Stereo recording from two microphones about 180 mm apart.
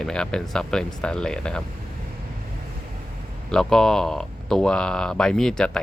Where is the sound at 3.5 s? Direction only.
5° left (ahead or behind).